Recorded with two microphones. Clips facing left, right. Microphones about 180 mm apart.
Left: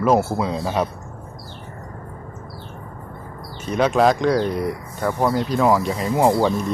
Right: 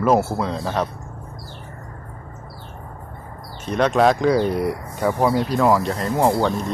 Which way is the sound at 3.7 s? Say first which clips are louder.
Even; 5° left (ahead or behind).